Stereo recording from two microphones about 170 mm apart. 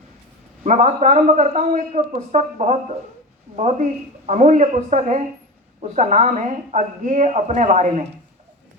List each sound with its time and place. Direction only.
0.6 s speech: 45° right (ahead or behind)